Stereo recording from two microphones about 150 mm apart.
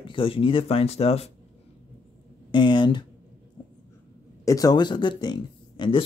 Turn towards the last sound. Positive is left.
turn(degrees=30)  # may be behind; listen again after turning